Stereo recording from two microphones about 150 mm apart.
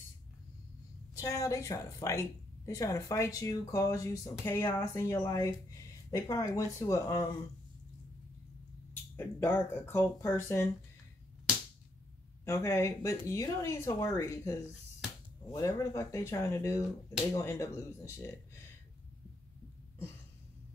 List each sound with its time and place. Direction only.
1.1 s a woman's voice: 20° left (ahead or behind)
9.1 s speech: 15° left (ahead or behind)
12.4 s a woman's voice: 20° left (ahead or behind)
15.5 s a woman's voice: 20° left (ahead or behind)